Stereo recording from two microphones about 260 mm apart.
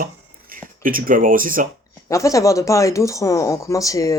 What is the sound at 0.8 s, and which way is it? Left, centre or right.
Speech, right.